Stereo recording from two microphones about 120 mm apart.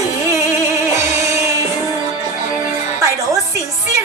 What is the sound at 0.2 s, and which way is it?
Music, 25° right (ahead or behind).